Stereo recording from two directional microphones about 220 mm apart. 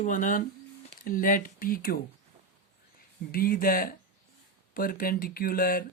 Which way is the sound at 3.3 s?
40° left (ahead or behind).